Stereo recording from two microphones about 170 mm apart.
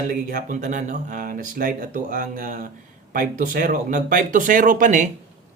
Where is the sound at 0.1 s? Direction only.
55° right (ahead or behind).